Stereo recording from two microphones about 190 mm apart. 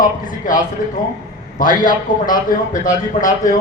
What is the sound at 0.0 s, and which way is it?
A man's voice, 45° left (ahead or behind).